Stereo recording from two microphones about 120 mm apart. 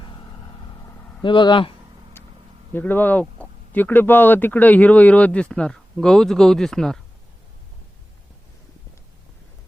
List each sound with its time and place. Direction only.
1.2 s speech: 40° left (ahead or behind)
2.7 s speech: 15° left (ahead or behind)